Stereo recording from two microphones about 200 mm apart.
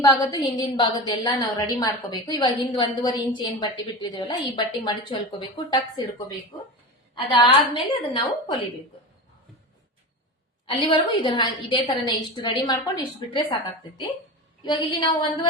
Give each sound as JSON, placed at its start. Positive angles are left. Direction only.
{"t": 0.0, "sound": "a woman's voice", "side_deg": 20}
{"t": 10.7, "sound": "a woman's voice", "side_deg": 25}